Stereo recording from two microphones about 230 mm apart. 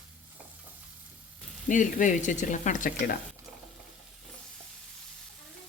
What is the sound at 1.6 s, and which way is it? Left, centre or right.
Speech, left.